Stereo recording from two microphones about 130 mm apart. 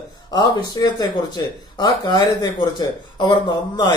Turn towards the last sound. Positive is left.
turn(degrees=35)  # may be behind; listen again after turning